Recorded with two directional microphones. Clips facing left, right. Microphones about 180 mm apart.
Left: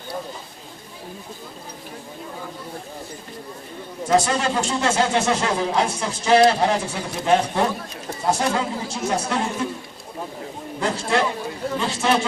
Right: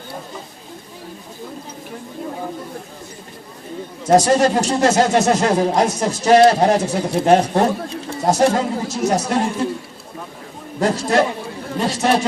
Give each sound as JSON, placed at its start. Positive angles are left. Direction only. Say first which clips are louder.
{"t": 4.0, "sound": "speech", "louder": "right 6 dB", "side_deg": -40}
{"t": 10.8, "sound": "a sound", "louder": "right 5 dB", "side_deg": -40}
{"t": 11.8, "sound": "speech", "louder": "right 5 dB", "side_deg": -40}